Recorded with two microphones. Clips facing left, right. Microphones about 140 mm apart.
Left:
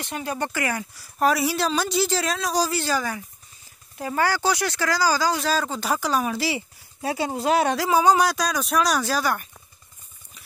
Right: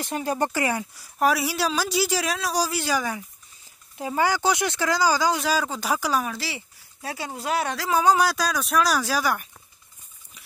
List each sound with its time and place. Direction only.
0.0 s speech: 40° right (ahead or behind); by 1.0 s 20° right (ahead or behind)
1.2 s speech: 5° right (ahead or behind)
6.2 s speech: 10° left (ahead or behind)
7.9 s speech: centre (ahead or behind)